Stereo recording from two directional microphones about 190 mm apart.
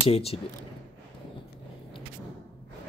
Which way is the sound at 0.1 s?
30° left (ahead or behind).